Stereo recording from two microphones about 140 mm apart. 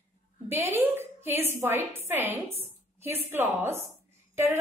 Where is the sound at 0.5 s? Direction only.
20° right (ahead or behind).